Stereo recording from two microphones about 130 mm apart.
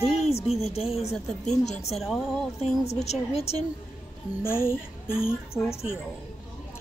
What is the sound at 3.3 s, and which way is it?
Speech, 55° left (ahead or behind).